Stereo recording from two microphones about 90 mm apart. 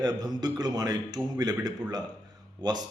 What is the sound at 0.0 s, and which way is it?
A man's voice, 50° right (ahead or behind).